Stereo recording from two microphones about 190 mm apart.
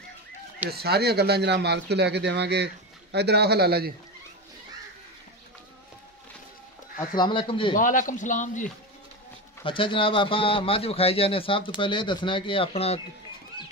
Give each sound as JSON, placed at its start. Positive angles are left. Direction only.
{"t": 0.7, "sound": "speech", "side_deg": -55}
{"t": 7.2, "sound": "speech", "side_deg": 25}
{"t": 7.7, "sound": "speech", "side_deg": 45}
{"t": 9.7, "sound": "speech", "side_deg": 25}